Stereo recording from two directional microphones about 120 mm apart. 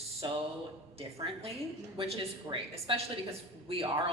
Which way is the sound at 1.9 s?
55° right (ahead or behind).